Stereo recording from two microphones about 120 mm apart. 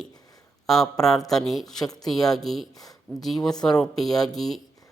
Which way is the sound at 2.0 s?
Centre (ahead or behind).